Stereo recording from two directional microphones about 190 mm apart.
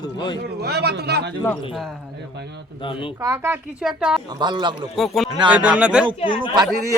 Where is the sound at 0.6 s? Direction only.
60° right (ahead or behind).